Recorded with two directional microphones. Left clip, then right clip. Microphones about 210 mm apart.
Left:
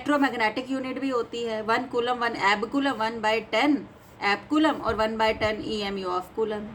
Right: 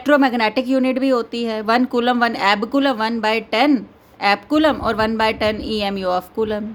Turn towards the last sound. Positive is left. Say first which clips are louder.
# right 7 dB
turn(degrees=-55)  # may be behind; listen again after turning